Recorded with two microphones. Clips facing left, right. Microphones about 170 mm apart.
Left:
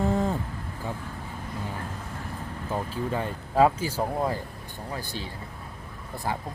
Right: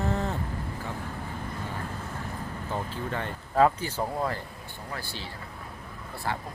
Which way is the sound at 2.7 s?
10° left (ahead or behind).